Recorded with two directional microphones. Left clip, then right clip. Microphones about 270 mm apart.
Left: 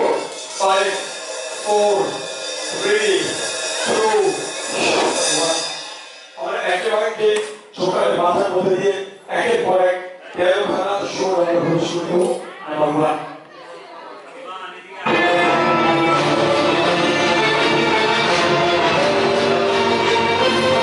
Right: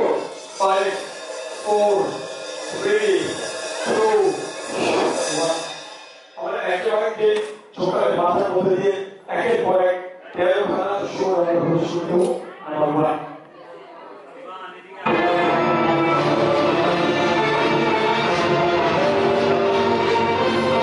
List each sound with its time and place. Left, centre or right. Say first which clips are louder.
0.0 s music: left 2 dB; centre
0.6 s speech: left 2 dB; centre
2.0 s music: left 3 dB; centre
4.4 s a sound: left 3 dB; centre
4.8 s a sound: left 3 dB; centre
6.4 s mantra: left 2 dB; centre
7.8 s a sound: left 2 dB; centre
11.9 s a man's voice: left 1 dB; centre
15.0 s music: left 3 dB; centre